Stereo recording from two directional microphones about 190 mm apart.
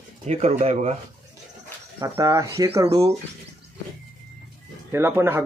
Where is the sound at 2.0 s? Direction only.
15° right (ahead or behind).